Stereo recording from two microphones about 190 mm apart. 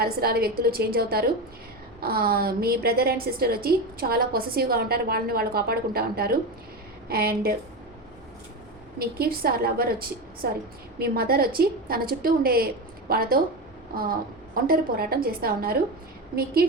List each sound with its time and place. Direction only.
0.0 s a woman's voice: 55° right (ahead or behind)
9.0 s a woman's voice: 55° right (ahead or behind)